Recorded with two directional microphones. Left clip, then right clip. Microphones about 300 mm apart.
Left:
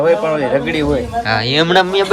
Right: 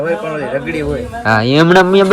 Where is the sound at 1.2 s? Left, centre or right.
Centre.